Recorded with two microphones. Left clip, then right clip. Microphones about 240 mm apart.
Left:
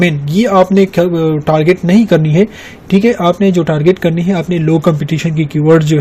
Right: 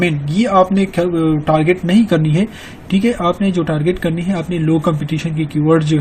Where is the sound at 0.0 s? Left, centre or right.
Left.